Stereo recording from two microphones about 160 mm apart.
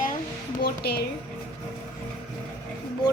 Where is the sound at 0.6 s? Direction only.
80° left.